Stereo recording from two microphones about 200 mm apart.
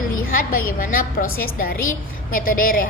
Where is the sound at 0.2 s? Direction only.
45° left (ahead or behind).